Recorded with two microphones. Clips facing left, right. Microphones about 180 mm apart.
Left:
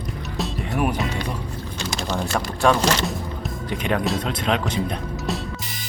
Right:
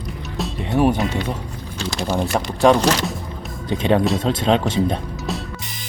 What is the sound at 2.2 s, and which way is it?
Speech, 20° right (ahead or behind).